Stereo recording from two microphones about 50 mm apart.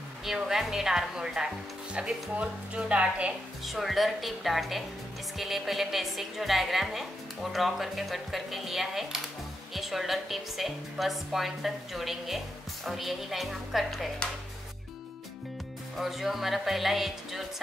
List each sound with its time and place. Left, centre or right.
0.2 s a woman's voice: centre; by 3.3 s right
3.6 s a woman's voice: centre
14.2 s speech: centre
16.0 s a woman's voice: centre